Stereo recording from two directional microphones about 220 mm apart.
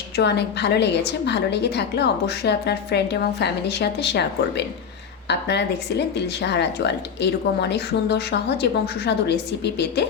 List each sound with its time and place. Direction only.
0.2 s a woman's voice: 50° left (ahead or behind)